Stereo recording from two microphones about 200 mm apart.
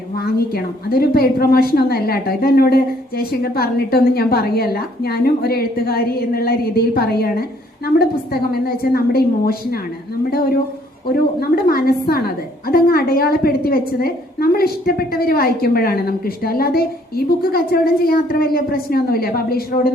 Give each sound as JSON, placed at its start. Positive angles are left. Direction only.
{"t": 0.2, "sound": "a woman's voice", "side_deg": 50}